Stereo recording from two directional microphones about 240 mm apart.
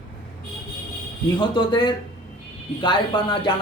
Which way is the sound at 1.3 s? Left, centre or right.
Centre.